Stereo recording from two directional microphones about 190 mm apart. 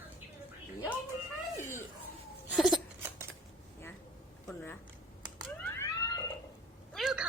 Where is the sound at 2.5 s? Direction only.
Centre (ahead or behind).